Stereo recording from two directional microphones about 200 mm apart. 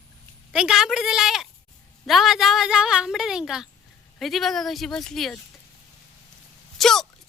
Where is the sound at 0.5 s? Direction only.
5° right (ahead or behind).